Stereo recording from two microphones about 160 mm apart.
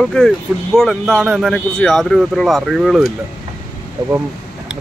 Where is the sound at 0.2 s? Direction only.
5° left (ahead or behind).